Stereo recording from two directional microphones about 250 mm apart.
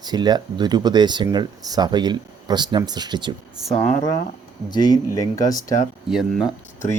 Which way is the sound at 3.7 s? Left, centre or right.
Centre.